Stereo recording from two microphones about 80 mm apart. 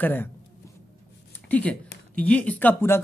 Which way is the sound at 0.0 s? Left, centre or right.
Left.